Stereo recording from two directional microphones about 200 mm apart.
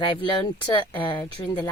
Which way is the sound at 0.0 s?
25° left (ahead or behind).